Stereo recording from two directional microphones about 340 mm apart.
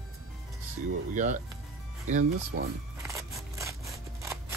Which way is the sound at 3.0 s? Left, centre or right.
Centre.